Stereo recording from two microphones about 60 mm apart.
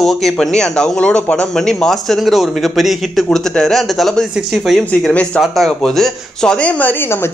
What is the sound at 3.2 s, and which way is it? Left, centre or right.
Speech, centre.